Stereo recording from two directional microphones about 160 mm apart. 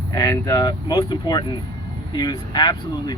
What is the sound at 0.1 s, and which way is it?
Speech, 25° left (ahead or behind).